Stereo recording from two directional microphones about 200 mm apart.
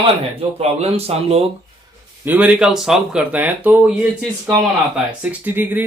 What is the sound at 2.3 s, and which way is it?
Speech, 5° right (ahead or behind).